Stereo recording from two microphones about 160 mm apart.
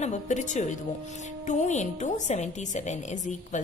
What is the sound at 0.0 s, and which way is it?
Speech, 45° left (ahead or behind).